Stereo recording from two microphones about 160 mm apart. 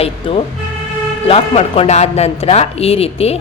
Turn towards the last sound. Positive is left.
turn(degrees=40)  # may be behind; listen again after turning